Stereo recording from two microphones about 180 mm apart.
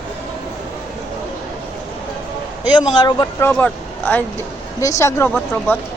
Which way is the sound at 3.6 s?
10° left (ahead or behind).